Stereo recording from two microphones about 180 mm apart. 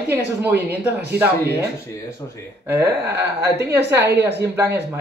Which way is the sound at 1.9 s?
15° left (ahead or behind).